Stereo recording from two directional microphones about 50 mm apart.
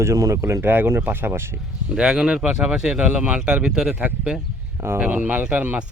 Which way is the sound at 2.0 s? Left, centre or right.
Centre.